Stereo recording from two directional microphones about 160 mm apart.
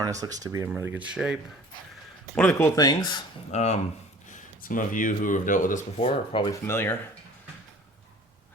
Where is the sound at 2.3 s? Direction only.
15° left (ahead or behind).